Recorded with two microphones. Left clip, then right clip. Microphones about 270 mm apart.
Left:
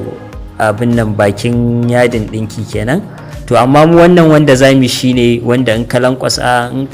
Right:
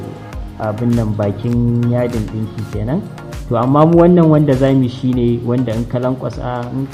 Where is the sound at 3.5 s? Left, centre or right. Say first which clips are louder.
Left 6 dB; left.